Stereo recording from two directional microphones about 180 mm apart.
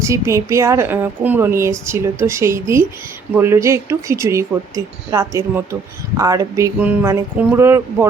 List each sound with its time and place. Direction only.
0.0 s a woman's voice: 15° right (ahead or behind)